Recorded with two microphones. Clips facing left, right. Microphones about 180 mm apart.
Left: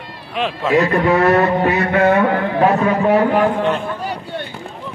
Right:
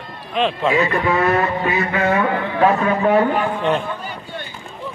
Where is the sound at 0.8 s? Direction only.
70° left (ahead or behind).